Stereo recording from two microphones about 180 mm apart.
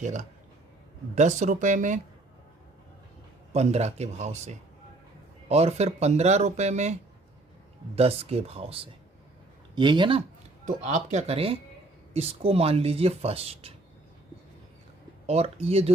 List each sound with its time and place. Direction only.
0.0 s speech: 40° right (ahead or behind)
3.5 s speech: 35° right (ahead or behind)
7.9 s speech: 35° right (ahead or behind)
10.7 s speech: 40° right (ahead or behind)
15.3 s speech: 35° right (ahead or behind)